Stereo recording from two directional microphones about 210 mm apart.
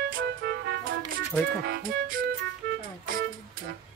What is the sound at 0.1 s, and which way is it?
Music, 45° right (ahead or behind).